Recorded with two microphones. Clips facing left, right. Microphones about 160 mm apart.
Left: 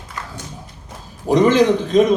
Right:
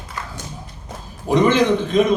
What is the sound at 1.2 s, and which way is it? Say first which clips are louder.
Speech: left 2 dB; 40° left (ahead or behind).